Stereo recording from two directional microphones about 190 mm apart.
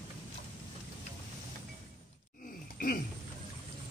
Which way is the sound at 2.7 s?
50° left (ahead or behind).